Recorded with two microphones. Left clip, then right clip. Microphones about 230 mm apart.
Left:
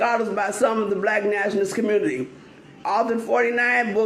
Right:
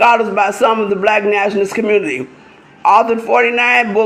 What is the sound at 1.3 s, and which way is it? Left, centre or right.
Speech, centre.